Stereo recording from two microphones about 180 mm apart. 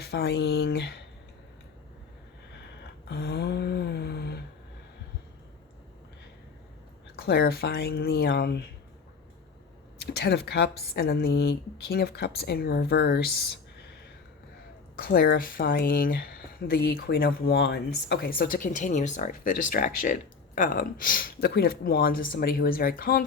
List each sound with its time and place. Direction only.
0.0 s speech: 65° left (ahead or behind)
2.8 s a sound: 65° left (ahead or behind)
7.2 s speech: 60° left (ahead or behind)
10.0 s speech: 65° left (ahead or behind)
14.9 s speech: 55° left (ahead or behind)